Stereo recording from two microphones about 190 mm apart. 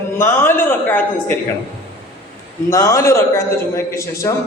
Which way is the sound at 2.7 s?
15° left (ahead or behind).